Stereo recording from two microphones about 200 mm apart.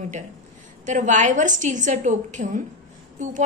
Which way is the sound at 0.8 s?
35° right (ahead or behind).